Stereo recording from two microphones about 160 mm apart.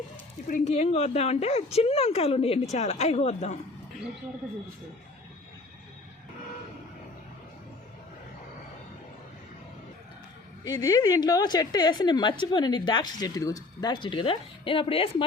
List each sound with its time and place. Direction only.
0.4 s speech: 55° left (ahead or behind)
0.7 s a woman's voice: 40° left (ahead or behind)
10.6 s a woman's voice: 25° left (ahead or behind)